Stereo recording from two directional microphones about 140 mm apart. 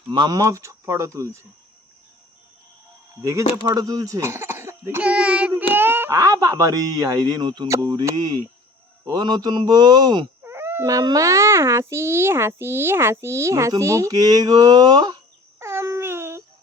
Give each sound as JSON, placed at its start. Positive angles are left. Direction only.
{"t": 0.1, "sound": "a child's voice", "side_deg": -30}
{"t": 3.2, "sound": "a child's voice", "side_deg": -20}
{"t": 10.4, "sound": "a child's voice", "side_deg": -15}
{"t": 15.5, "sound": "a sound", "side_deg": -20}